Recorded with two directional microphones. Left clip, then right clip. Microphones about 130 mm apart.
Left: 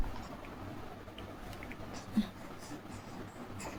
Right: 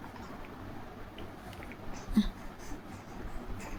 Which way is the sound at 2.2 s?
60° right (ahead or behind).